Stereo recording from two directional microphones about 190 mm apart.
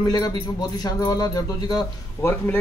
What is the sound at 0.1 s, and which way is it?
A man's voice, 20° left (ahead or behind).